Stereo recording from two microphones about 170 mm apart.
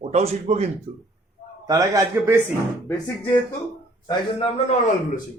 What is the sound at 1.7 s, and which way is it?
Speech, 20° right (ahead or behind).